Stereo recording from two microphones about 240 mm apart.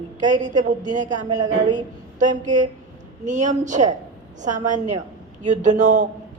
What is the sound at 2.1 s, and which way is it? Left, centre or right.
Speech, right.